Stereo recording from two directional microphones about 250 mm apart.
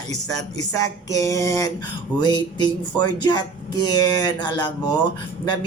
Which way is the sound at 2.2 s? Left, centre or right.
Centre.